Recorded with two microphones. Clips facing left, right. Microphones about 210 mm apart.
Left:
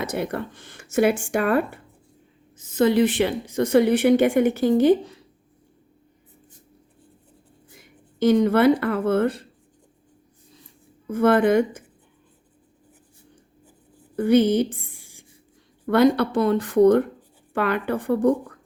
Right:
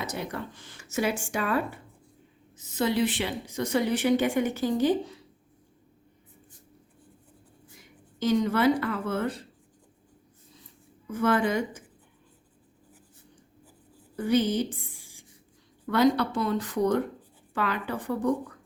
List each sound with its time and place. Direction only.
0.0 s a woman's voice: 55° left (ahead or behind)
8.2 s a woman's voice: 55° left (ahead or behind)
11.1 s a woman's voice: 55° left (ahead or behind)
14.2 s a woman's voice: 60° left (ahead or behind)